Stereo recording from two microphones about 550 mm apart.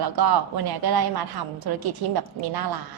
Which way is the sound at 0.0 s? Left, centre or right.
Right.